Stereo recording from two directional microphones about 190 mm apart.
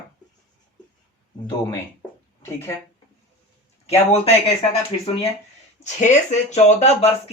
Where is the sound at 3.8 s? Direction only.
35° left (ahead or behind).